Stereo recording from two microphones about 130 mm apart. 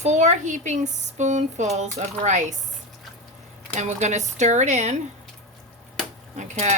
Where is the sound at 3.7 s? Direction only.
60° right (ahead or behind).